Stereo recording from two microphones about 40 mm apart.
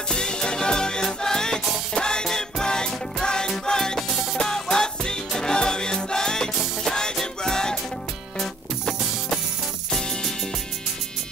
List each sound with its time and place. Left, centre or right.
0.1 s music: centre